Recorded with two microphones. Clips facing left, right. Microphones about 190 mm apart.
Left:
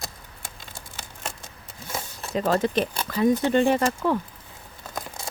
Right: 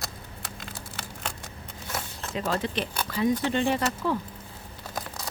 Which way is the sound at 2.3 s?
45° left (ahead or behind).